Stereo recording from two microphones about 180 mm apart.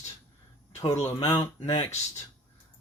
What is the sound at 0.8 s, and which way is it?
Speech, 20° left (ahead or behind).